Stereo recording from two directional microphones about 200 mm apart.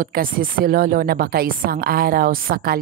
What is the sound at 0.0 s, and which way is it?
Speech, 45° right (ahead or behind).